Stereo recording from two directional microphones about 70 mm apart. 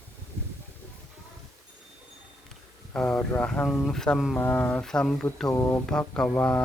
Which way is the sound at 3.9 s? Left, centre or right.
Centre.